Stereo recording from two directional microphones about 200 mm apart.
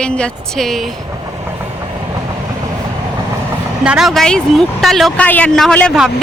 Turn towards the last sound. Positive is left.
turn(degrees=0)  # may be behind; listen again after turning